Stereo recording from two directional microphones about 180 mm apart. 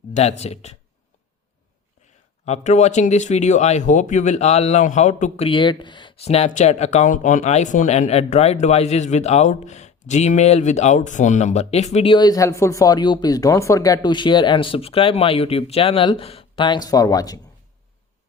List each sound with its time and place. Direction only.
0.1 s speech: 35° left (ahead or behind)
2.4 s speech: 40° left (ahead or behind)
5.5 s speech: 25° left (ahead or behind)